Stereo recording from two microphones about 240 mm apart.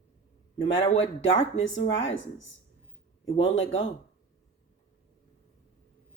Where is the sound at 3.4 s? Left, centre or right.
Left.